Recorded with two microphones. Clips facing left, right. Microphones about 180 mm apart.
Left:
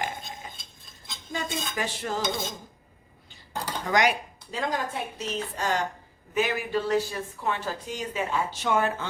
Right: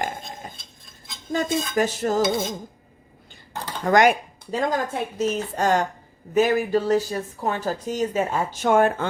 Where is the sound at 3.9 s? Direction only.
50° right (ahead or behind).